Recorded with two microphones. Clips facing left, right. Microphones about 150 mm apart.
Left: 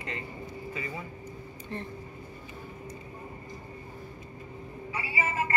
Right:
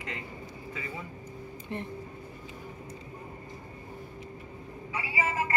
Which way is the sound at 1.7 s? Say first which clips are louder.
Right 1 dB; 20° right (ahead or behind).